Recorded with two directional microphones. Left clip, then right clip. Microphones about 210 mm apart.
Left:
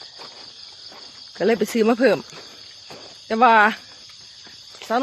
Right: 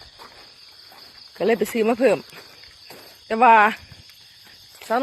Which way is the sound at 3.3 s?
Centre (ahead or behind).